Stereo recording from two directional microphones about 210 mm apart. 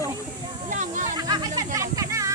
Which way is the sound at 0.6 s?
35° right (ahead or behind).